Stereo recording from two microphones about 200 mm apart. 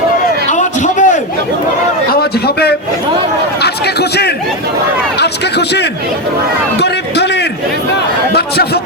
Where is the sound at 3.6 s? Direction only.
55° left (ahead or behind).